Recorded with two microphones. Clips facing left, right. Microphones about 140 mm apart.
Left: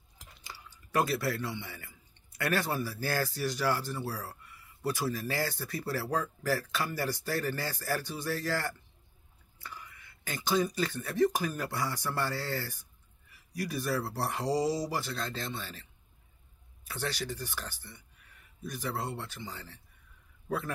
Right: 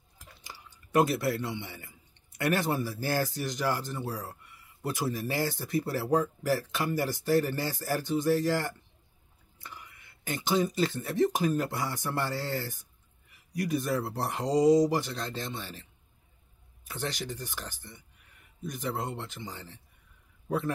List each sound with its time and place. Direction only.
0.5 s a man's voice: 20° right (ahead or behind)
16.8 s speech: 20° right (ahead or behind)